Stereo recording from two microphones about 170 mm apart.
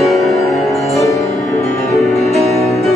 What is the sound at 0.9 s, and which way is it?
Music, 20° left (ahead or behind).